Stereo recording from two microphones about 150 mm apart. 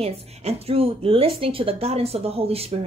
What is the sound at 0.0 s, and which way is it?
Speech, 45° right (ahead or behind).